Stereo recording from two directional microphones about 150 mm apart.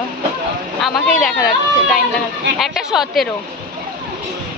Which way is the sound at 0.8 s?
Centre (ahead or behind).